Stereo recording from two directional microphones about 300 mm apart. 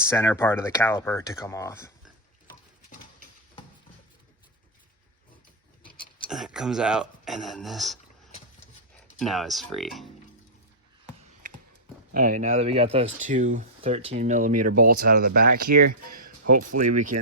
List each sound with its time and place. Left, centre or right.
0.1 s speech: centre
6.3 s speech: centre
9.2 s speech: centre
12.1 s speech: right